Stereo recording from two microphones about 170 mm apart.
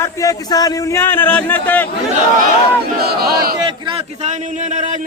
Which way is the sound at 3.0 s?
65° right (ahead or behind).